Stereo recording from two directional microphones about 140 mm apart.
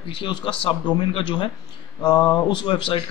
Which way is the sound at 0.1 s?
35° left (ahead or behind).